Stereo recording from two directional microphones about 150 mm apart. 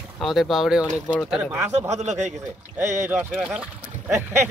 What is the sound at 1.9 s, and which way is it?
Speech, 50° right (ahead or behind).